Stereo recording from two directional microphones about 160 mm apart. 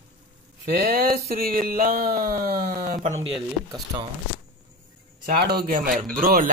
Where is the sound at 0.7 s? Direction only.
70° right (ahead or behind).